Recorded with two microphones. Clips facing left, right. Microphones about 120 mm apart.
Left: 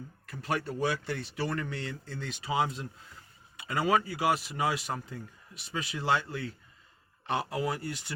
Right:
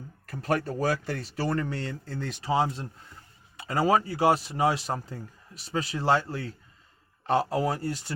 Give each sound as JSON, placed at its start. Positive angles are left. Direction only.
{"t": 0.3, "sound": "speech", "side_deg": -45}